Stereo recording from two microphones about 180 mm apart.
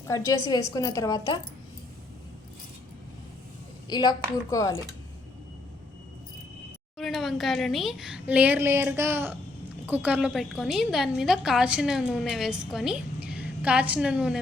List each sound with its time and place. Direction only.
0.0 s a woman's voice: 15° left (ahead or behind)
3.8 s a woman's voice: 25° left (ahead or behind)
7.0 s a woman's voice: centre (ahead or behind)